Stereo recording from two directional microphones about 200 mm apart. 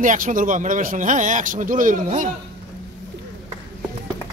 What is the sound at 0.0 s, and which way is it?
Speech, 40° right (ahead or behind).